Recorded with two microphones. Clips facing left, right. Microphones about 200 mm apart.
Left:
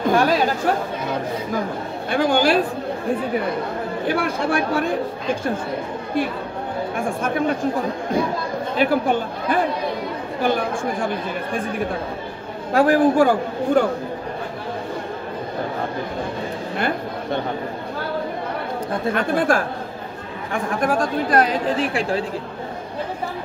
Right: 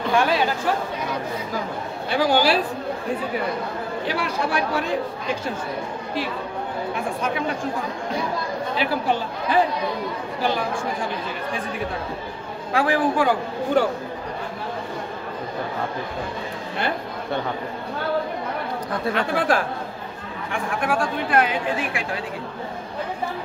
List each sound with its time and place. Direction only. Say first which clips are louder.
0.0 s chatter: left 3 dB; 40° left (ahead or behind)
2.0 s a man's voice: left 2 dB; 50° left (ahead or behind)
4.0 s a man's voice: left 4 dB; 50° left (ahead or behind)
7.2 s a man's voice: left 4 dB; 50° left (ahead or behind)
8.7 s a man's voice: left 5 dB; 50° left (ahead or behind)
12.7 s a man's voice: left 6 dB; 45° left (ahead or behind)
19.1 s a man's voice: left 2 dB; 45° left (ahead or behind)